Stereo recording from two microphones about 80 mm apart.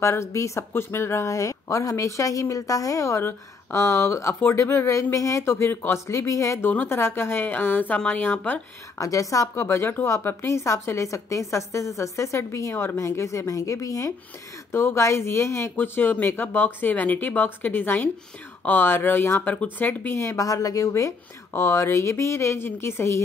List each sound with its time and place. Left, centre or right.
0.0 s speech: left
6.6 s speech: left
6.9 s speech: left
8.9 s speech: left
14.7 s speech: left
20.2 s speech: left